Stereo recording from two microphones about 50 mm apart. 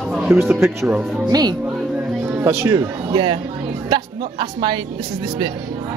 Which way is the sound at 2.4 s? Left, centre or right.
Right.